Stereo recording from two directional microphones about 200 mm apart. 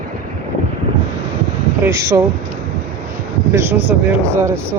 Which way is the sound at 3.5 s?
10° right (ahead or behind).